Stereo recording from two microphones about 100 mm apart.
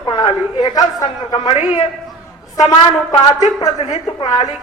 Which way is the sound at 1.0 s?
60° left (ahead or behind).